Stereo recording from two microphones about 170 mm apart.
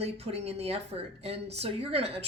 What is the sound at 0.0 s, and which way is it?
A woman's voice, 35° right (ahead or behind).